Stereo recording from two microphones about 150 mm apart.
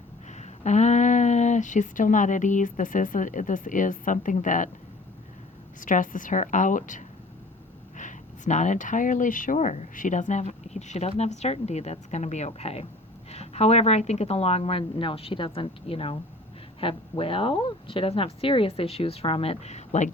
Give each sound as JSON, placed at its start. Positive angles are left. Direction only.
{"t": 0.3, "sound": "speech", "side_deg": 50}
{"t": 5.8, "sound": "a woman's voice", "side_deg": 60}